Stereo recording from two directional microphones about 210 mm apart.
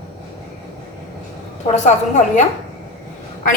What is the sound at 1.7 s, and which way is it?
Speech, 35° left (ahead or behind).